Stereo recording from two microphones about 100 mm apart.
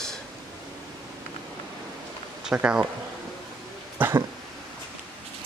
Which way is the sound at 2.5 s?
10° right (ahead or behind).